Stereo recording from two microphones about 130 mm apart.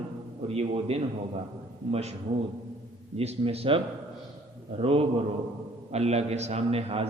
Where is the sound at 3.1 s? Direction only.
50° right (ahead or behind).